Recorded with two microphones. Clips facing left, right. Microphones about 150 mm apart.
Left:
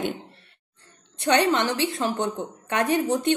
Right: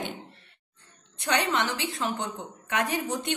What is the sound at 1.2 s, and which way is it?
A woman's voice, 30° left (ahead or behind).